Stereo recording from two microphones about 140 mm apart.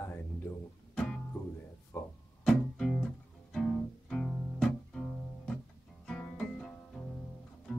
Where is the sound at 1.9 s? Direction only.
15° left (ahead or behind).